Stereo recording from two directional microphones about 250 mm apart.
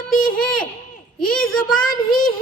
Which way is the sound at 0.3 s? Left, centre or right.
Left.